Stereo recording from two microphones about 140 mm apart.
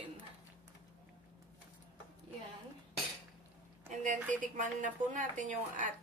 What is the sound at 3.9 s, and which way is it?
A woman's voice, 65° right (ahead or behind).